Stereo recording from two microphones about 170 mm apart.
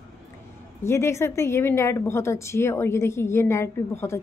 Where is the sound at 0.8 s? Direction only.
15° left (ahead or behind).